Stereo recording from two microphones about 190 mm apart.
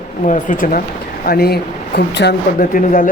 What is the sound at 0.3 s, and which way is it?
Speech, 45° left (ahead or behind).